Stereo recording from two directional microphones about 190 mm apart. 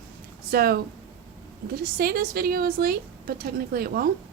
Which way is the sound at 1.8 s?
50° right (ahead or behind).